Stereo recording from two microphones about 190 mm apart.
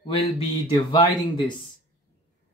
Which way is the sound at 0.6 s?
25° left (ahead or behind).